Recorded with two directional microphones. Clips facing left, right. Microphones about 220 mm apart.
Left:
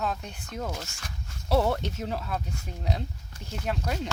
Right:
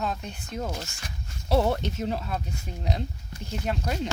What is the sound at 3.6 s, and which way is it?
Speech, 10° right (ahead or behind).